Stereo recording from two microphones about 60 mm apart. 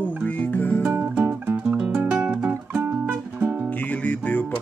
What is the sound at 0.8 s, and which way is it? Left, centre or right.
Music, right.